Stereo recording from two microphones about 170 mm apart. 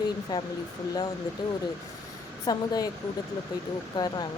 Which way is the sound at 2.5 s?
20° left (ahead or behind).